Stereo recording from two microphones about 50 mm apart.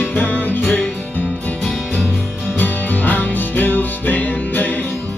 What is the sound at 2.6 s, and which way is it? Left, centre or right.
Music, left.